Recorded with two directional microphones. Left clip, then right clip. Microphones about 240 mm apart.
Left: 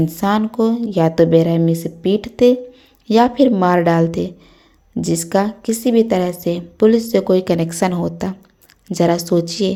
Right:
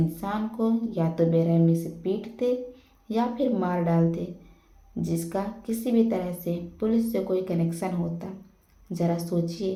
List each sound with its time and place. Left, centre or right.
0.1 s speech: left